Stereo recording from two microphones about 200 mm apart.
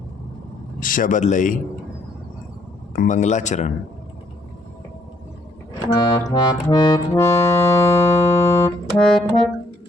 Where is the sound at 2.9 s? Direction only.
40° left (ahead or behind).